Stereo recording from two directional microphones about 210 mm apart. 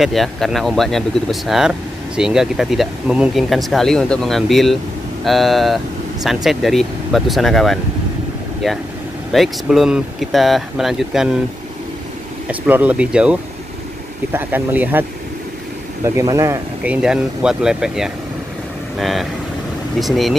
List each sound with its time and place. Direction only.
0.0 s speech: centre (ahead or behind)
12.4 s speech: 5° right (ahead or behind)